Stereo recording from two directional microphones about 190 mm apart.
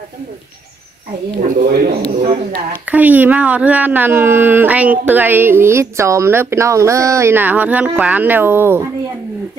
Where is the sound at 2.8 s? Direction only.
10° right (ahead or behind).